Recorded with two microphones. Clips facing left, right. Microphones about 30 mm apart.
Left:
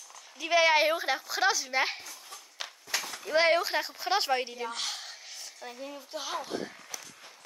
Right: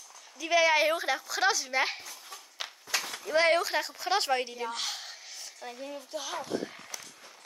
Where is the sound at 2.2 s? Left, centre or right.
Centre.